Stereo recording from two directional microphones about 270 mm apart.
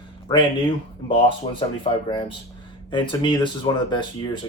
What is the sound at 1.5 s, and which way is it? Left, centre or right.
Speech, centre.